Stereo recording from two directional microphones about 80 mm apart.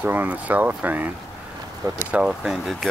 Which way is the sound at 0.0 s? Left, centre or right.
Right.